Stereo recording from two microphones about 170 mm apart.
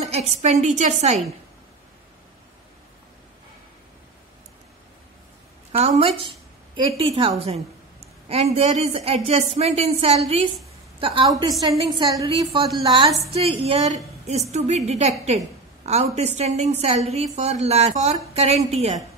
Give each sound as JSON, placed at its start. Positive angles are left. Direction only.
{"t": 0.0, "sound": "a woman's voice", "side_deg": -40}
{"t": 5.7, "sound": "a woman's voice", "side_deg": -35}
{"t": 12.3, "sound": "a woman's voice", "side_deg": -30}